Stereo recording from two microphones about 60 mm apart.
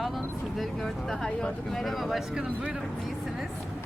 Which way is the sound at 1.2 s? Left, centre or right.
Centre.